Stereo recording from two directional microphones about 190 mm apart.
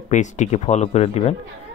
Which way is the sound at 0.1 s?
40° left (ahead or behind).